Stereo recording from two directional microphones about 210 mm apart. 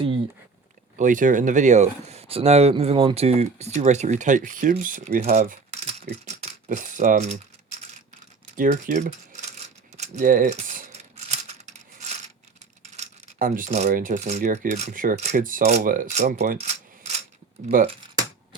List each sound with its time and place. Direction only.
0.9 s speech: 40° right (ahead or behind)
8.5 s rattle: 40° right (ahead or behind)
12.8 s speech: 35° right (ahead or behind)
16.6 s rub: 30° right (ahead or behind)
17.7 s speech: 40° right (ahead or behind)